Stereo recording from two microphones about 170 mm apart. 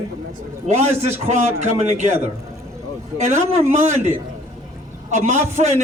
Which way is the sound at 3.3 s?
45° right (ahead or behind).